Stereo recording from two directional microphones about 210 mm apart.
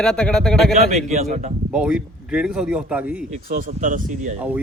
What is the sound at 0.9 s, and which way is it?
Speech, 35° right (ahead or behind).